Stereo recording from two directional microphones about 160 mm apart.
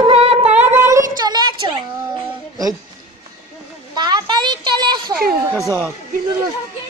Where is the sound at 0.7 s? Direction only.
20° right (ahead or behind).